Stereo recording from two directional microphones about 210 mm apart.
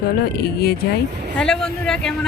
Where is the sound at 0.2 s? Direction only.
50° left (ahead or behind).